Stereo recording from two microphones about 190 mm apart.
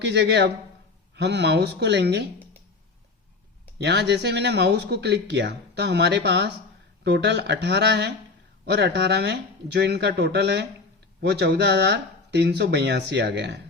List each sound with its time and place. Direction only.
0.0 s speech: 65° right (ahead or behind)
3.8 s speech: 65° right (ahead or behind)